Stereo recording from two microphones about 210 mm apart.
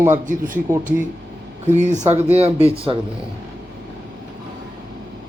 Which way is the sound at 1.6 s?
35° right (ahead or behind).